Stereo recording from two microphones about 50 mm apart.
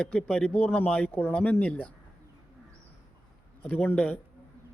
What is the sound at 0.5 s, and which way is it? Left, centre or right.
Speech, left.